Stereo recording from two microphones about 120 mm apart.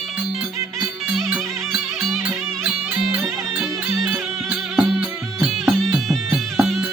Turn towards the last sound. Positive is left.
turn(degrees=0)  # may be behind; listen again after turning